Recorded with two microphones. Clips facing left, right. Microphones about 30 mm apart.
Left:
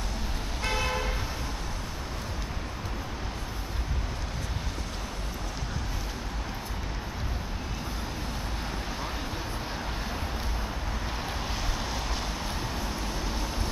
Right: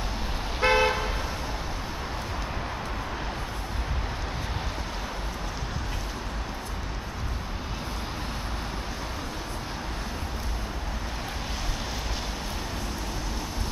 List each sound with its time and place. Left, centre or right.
0.6 s toot: right